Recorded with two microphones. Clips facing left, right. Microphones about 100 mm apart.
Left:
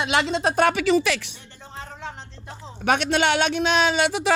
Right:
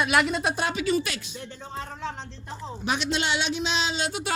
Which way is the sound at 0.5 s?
65° left (ahead or behind).